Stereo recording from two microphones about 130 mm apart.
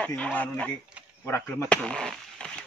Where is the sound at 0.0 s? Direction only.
10° left (ahead or behind).